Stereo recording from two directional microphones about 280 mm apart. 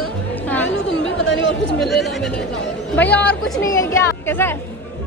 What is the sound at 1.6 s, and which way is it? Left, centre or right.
Speech, centre.